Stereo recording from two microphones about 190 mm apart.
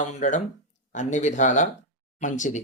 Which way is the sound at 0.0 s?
40° left (ahead or behind).